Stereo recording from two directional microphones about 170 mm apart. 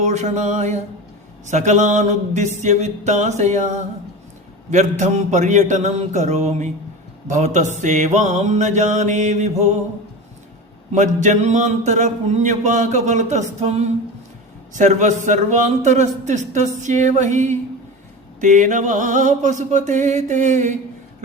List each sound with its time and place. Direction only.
0.0 s mantra: 40° right (ahead or behind)
10.9 s mantra: 45° right (ahead or behind)